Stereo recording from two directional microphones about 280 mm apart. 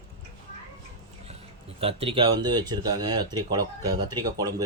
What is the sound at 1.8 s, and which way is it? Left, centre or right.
Speech, centre.